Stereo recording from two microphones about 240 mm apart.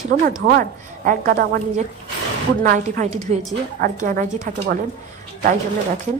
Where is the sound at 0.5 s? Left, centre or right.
Right.